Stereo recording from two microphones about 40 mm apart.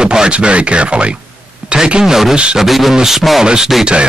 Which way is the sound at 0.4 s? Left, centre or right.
Right.